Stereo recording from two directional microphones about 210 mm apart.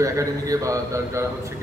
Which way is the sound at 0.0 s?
15° right (ahead or behind).